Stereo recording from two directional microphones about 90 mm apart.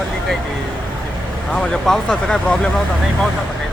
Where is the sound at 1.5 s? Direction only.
5° left (ahead or behind).